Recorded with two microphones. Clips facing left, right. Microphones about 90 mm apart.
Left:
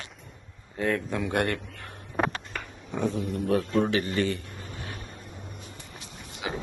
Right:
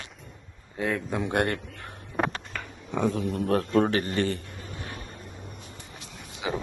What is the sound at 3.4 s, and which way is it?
Speech, 45° right (ahead or behind).